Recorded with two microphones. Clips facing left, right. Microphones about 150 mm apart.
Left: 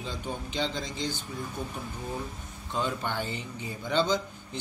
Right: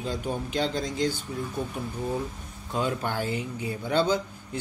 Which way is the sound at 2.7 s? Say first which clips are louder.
Right 3 dB; 10° right (ahead or behind).